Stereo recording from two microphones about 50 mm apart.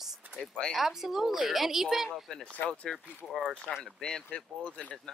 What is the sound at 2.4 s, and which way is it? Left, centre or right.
Speech, left.